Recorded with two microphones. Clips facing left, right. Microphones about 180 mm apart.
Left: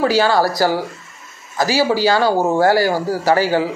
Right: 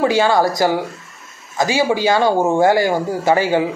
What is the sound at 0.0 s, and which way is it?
Speech, 20° right (ahead or behind).